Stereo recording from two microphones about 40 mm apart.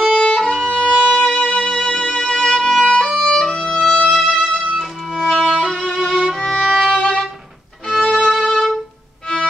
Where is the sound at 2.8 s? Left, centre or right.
Left.